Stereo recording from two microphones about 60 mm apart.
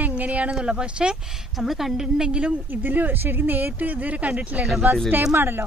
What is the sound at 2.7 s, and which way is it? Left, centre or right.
Speech, right.